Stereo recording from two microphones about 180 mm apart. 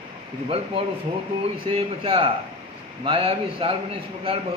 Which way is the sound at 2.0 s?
30° right (ahead or behind).